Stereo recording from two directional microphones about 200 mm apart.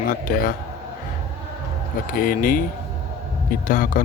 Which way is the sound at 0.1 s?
45° left (ahead or behind).